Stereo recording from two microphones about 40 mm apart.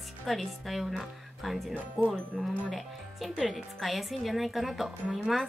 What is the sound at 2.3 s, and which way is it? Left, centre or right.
A woman's voice, centre.